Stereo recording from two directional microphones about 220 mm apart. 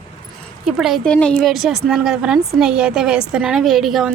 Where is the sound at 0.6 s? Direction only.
Centre (ahead or behind).